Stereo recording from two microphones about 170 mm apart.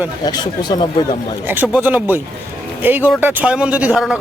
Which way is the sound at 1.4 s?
10° right (ahead or behind).